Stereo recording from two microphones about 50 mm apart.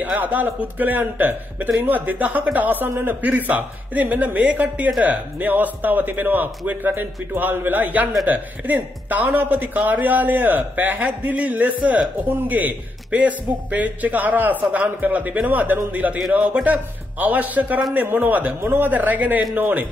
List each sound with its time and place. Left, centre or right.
0.0 s speech: right
16.3 s a man's voice: centre
16.6 s speech: right
18.6 s speech: right
18.9 s speech: right